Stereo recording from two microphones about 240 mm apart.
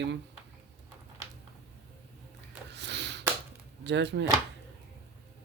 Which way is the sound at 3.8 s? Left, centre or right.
Right.